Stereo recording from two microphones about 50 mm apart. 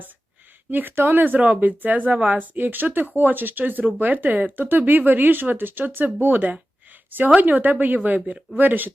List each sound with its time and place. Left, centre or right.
0.7 s speech: right